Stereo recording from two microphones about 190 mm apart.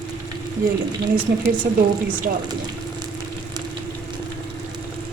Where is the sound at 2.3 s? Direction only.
35° right (ahead or behind).